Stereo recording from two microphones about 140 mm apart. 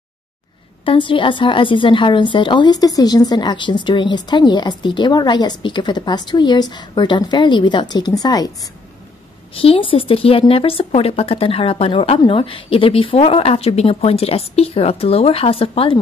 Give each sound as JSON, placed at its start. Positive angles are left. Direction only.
{"t": 0.8, "sound": "a woman's voice", "side_deg": 35}
{"t": 9.6, "sound": "a woman's voice", "side_deg": 40}